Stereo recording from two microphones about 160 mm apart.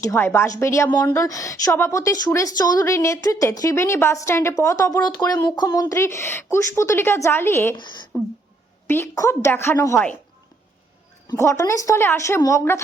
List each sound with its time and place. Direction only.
0.0 s a woman's voice: 15° left (ahead or behind)
11.3 s a woman's voice: 20° left (ahead or behind)